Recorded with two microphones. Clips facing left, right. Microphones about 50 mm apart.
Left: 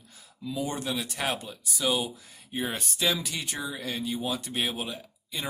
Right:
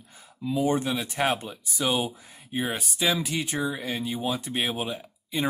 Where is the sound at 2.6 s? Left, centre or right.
Centre.